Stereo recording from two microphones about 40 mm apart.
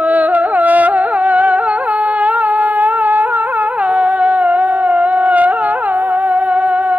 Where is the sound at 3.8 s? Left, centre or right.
Right.